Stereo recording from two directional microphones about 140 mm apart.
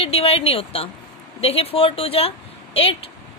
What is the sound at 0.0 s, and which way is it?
Speech, 45° left (ahead or behind).